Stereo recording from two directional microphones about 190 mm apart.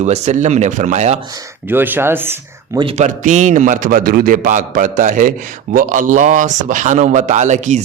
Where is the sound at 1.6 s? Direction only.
10° right (ahead or behind).